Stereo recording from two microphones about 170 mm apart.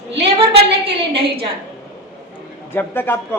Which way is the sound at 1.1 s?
35° right (ahead or behind).